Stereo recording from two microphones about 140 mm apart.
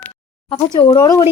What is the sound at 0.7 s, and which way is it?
Speech, 25° left (ahead or behind).